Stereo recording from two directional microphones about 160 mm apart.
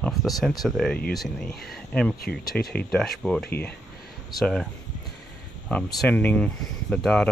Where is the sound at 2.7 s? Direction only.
5° left (ahead or behind).